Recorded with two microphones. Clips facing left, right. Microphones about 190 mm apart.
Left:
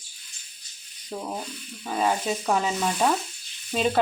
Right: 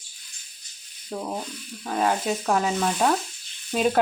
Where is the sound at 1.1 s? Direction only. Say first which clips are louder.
Right 2 dB; 5° left (ahead or behind).